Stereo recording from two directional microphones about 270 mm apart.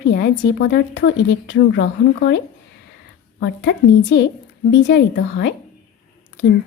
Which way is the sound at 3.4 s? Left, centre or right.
Left.